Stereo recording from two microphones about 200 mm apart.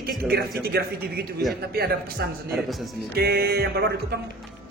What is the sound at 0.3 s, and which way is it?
Speech, 50° right (ahead or behind).